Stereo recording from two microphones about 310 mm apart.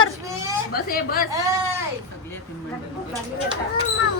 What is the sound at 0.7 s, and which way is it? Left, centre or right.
Speech, left.